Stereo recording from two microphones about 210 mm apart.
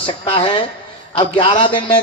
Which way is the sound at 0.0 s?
25° left (ahead or behind).